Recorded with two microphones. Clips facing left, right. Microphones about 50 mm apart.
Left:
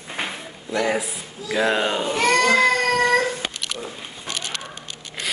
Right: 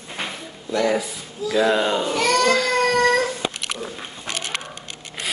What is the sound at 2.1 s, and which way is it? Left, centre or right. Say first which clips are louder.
Baby cry: left 2 dB; left.